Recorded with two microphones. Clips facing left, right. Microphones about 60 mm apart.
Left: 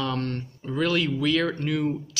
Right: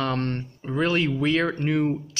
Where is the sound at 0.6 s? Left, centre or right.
Right.